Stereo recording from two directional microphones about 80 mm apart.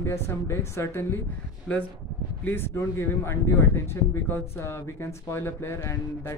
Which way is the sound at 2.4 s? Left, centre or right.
Left.